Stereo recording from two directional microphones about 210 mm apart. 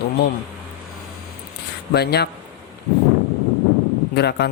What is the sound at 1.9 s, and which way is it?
Speech, 50° left (ahead or behind).